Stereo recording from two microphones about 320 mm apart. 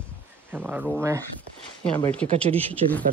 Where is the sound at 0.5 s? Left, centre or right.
Centre.